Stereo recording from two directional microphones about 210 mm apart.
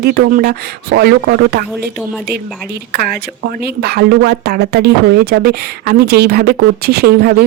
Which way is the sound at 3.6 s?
50° right (ahead or behind).